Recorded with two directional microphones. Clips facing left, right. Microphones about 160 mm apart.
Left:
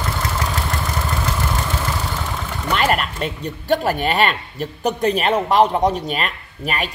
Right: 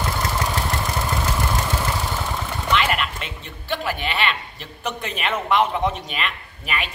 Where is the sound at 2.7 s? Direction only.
40° left (ahead or behind).